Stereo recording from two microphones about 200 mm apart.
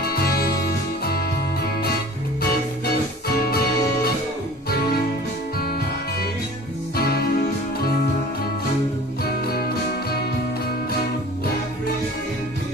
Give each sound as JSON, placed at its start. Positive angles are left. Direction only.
{"t": 0.0, "sound": "music", "side_deg": 50}
{"t": 2.8, "sound": "music", "side_deg": 50}
{"t": 7.0, "sound": "music", "side_deg": 50}
{"t": 9.2, "sound": "music", "side_deg": 50}